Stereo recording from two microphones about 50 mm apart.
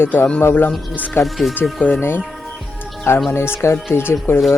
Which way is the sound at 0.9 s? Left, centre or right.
Left.